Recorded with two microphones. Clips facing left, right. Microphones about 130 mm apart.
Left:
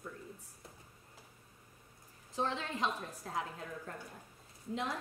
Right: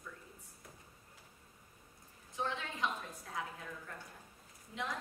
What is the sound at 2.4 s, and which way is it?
A woman's voice, 35° left (ahead or behind).